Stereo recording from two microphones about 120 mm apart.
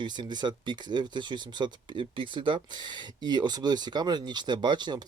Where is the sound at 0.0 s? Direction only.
40° right (ahead or behind).